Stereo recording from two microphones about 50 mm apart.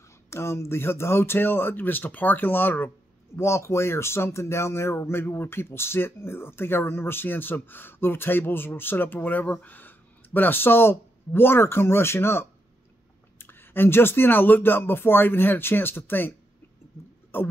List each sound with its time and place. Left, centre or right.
0.3 s speech: left
3.3 s speech: left